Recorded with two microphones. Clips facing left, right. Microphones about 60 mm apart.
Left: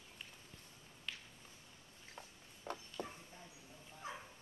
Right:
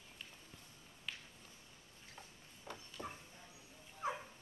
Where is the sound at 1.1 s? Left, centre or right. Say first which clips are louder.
Even; centre.